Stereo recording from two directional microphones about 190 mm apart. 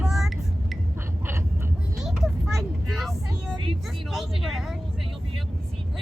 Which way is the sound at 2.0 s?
Centre (ahead or behind).